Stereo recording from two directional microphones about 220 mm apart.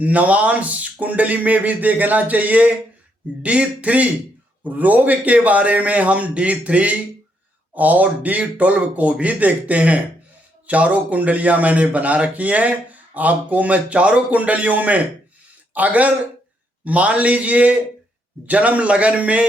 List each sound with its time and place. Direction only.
0.0 s a man's voice: 5° right (ahead or behind)